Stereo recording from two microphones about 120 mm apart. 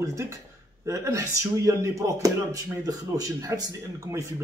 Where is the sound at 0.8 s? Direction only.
25° right (ahead or behind).